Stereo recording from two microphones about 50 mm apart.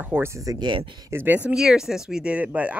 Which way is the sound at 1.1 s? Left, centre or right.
Right.